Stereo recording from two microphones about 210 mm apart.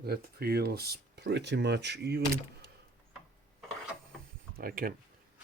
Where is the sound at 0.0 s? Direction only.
50° right (ahead or behind).